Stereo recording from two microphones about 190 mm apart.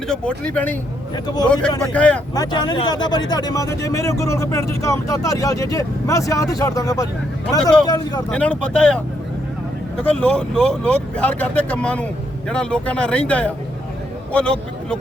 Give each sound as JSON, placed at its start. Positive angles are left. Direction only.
{"t": 0.1, "sound": "speech", "side_deg": 5}
{"t": 1.1, "sound": "speech", "side_deg": 20}
{"t": 1.9, "sound": "speech", "side_deg": 5}
{"t": 2.3, "sound": "speech", "side_deg": 20}
{"t": 8.3, "sound": "speech", "side_deg": 5}
{"t": 10.0, "sound": "speech", "side_deg": 5}